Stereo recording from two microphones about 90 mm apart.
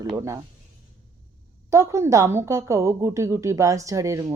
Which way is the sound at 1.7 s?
35° right (ahead or behind).